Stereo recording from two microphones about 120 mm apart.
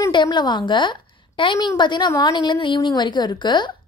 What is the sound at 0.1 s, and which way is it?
A woman's voice, 40° left (ahead or behind).